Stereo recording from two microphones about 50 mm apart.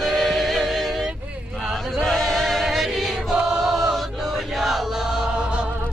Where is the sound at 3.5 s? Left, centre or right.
Centre.